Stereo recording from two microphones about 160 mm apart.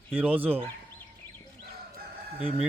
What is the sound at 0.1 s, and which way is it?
Speech, 10° right (ahead or behind).